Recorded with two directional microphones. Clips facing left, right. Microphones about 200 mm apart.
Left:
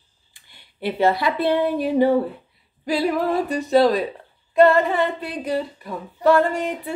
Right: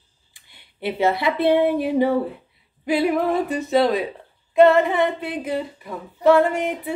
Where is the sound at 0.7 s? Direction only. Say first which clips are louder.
Left 1 dB; 20° right (ahead or behind).